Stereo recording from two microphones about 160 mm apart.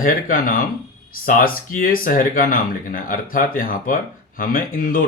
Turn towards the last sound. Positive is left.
turn(degrees=60)  # may be behind; listen again after turning